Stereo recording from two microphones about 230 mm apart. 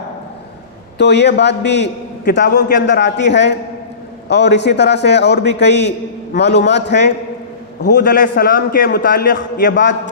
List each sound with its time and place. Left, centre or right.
0.9 s a man's voice: left